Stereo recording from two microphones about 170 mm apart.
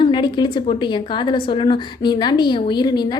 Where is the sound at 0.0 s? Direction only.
25° left (ahead or behind).